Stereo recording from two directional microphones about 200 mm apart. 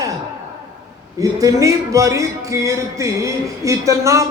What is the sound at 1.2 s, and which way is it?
A man's voice, 15° right (ahead or behind).